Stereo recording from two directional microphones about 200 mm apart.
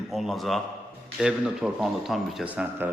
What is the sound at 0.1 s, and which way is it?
A man's voice, centre (ahead or behind).